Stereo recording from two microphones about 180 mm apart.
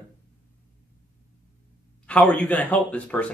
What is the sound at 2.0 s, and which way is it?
Speech, 5° left (ahead or behind).